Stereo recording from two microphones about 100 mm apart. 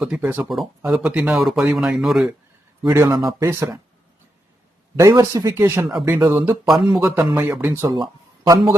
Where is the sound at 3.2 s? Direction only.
30° right (ahead or behind).